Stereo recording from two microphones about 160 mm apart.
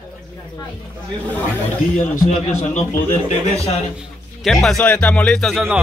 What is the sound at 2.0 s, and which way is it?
Speech, 50° left (ahead or behind).